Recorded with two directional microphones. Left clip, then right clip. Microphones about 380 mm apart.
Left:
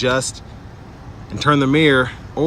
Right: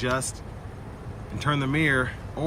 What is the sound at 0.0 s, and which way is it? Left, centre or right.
Speech, centre.